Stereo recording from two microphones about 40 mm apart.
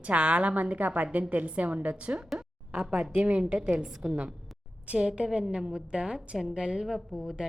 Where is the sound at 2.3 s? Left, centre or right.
Centre.